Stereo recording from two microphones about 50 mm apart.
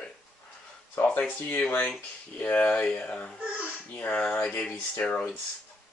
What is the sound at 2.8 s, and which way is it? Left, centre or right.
Speech, left.